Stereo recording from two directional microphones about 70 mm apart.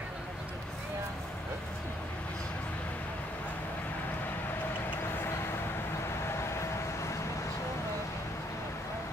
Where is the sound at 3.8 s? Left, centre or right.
Left.